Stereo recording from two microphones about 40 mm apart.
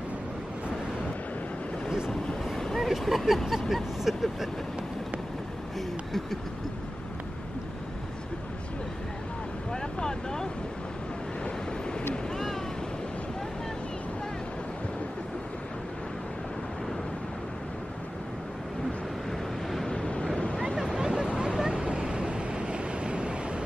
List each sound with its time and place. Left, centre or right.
1.9 s vehicle: centre
2.5 s vehicle: centre
2.9 s speech: centre
9.7 s boat: centre
19.9 s vehicle: left
20.7 s a sound: centre
21.0 s a sound: centre
21.4 s hubbub: centre
21.8 s vehicle: right